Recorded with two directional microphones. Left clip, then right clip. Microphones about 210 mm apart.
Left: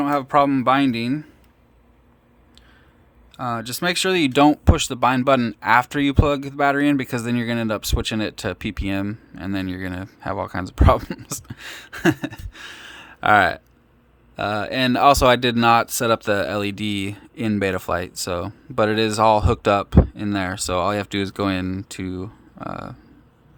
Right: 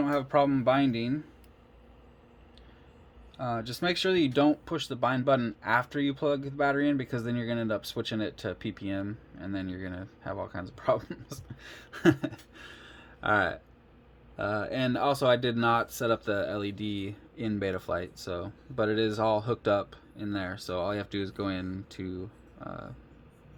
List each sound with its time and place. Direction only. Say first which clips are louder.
0.0 s speech: left 8 dB; 30° left (ahead or behind)
3.3 s speech: left 7 dB; 30° left (ahead or behind)
11.4 s a sound: left 11 dB; 35° left (ahead or behind)
14.3 s speech: left 8 dB; 25° left (ahead or behind)